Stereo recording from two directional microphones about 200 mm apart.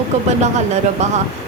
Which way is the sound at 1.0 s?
35° right (ahead or behind).